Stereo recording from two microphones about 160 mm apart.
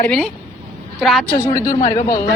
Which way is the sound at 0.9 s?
Centre (ahead or behind).